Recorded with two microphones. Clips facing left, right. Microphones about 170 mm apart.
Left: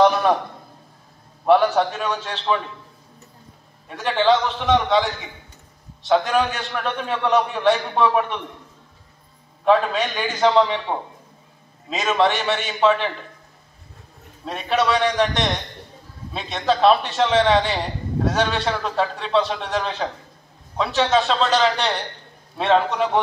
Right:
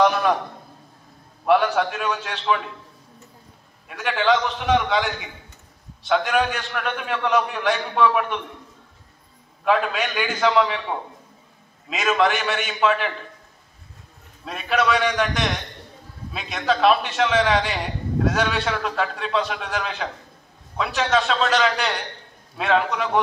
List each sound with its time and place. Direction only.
0.0 s a man's voice: 35° left (ahead or behind)
1.4 s a man's voice: 35° left (ahead or behind)
3.9 s a man's voice: 35° left (ahead or behind)
9.7 s a man's voice: 35° left (ahead or behind)
11.9 s a man's voice: 30° left (ahead or behind)
14.4 s a man's voice: 30° left (ahead or behind)